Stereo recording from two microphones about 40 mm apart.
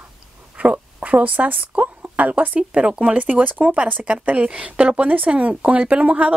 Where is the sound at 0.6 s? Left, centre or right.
Right.